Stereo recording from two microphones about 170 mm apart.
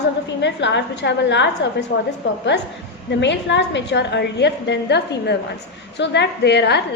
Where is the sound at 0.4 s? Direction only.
90° left.